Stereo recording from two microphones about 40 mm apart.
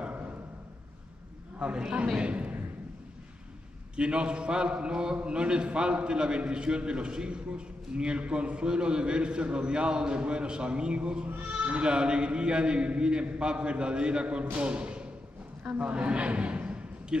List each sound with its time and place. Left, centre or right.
2.1 s a man's voice: right
3.9 s a man's voice: right
14.4 s speech: right
14.7 s music: right
15.8 s a man's voice: right